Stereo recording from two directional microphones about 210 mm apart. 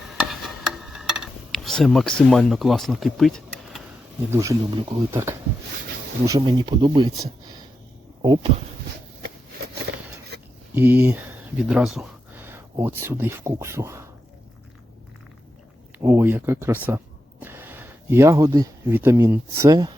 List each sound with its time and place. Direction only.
0.2 s a sound: centre (ahead or behind)
4.3 s speech: 15° right (ahead or behind)
10.8 s speech: 10° right (ahead or behind)
16.0 s speech: 10° right (ahead or behind)